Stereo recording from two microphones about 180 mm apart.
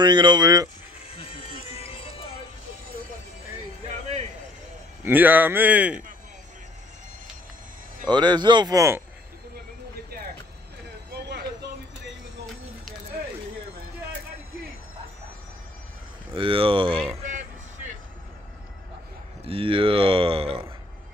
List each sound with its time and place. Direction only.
0.0 s speech: 25° right (ahead or behind)
1.1 s music: 35° left (ahead or behind)
3.8 s music: 35° right (ahead or behind)
5.0 s a man's voice: 10° right (ahead or behind)
8.1 s speech: 25° right (ahead or behind)
11.1 s a sound: 65° right (ahead or behind)
16.3 s speech: 30° right (ahead or behind)
17.1 s music: 40° right (ahead or behind)
19.4 s speech: 30° right (ahead or behind)